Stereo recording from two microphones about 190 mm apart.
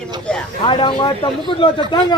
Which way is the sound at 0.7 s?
25° left (ahead or behind).